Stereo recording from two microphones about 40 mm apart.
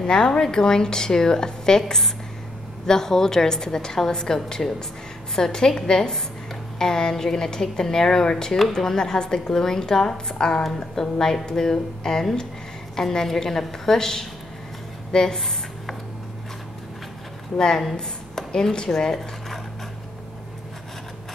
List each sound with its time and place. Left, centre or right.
0.0 s a woman's voice: centre
17.6 s a woman's voice: centre